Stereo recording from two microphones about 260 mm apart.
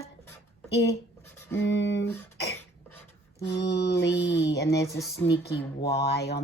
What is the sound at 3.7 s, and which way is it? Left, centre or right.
Speech, left.